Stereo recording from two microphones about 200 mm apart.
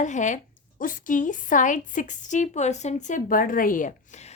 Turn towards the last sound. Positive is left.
turn(degrees=40)  # may be behind; listen again after turning